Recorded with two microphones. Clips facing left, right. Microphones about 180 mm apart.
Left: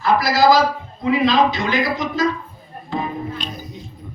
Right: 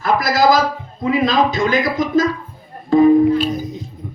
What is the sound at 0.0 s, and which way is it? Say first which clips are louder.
A man's voice: even; 50° right (ahead or behind).